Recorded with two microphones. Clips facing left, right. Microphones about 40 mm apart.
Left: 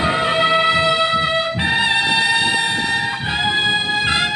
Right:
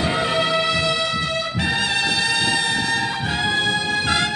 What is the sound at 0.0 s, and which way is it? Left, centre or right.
Music, left.